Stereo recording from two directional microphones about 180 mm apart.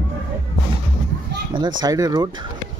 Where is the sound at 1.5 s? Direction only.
25° right (ahead or behind).